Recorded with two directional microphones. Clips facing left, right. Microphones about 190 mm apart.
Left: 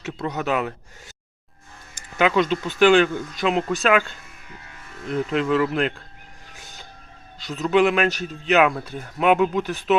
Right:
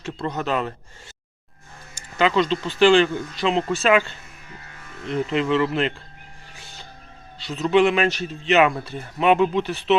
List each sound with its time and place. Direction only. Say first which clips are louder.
0.3 s speech: left 1 dB; 10° left (ahead or behind)
2.1 s speech: even; 10° left (ahead or behind)
5.0 s speech: even; centre (ahead or behind)
7.4 s speech: right 1 dB; centre (ahead or behind)